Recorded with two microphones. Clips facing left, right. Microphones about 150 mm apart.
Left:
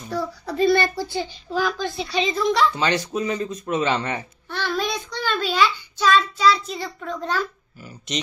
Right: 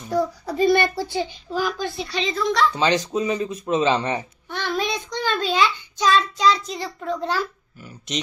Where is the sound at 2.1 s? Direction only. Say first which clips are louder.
Left 3 dB; 10° left (ahead or behind).